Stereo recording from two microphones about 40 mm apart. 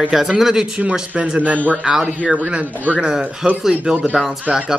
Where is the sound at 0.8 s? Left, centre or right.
Right.